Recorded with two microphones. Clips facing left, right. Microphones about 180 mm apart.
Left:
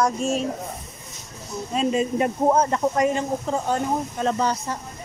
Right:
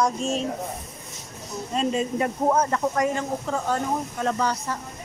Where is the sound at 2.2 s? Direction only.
25° left (ahead or behind).